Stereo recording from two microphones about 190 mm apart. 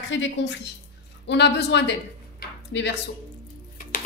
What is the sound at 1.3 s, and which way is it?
A woman's voice, 65° left (ahead or behind).